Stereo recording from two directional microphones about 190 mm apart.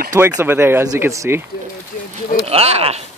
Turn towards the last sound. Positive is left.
turn(degrees=-30)  # may be behind; listen again after turning